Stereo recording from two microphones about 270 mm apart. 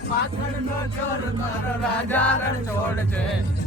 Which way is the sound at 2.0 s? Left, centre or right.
Centre.